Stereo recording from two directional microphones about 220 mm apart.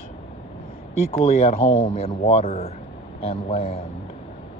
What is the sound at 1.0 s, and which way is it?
Speech, 30° left (ahead or behind).